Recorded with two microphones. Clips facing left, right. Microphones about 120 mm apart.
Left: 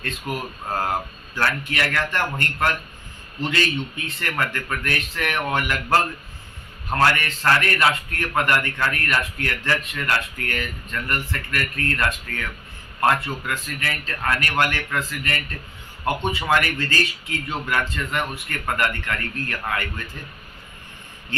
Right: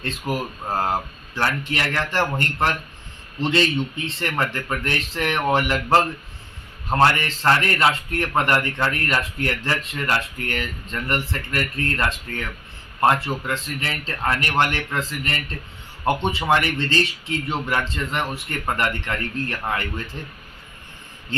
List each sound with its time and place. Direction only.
0.0 s a man's voice: 30° right (ahead or behind)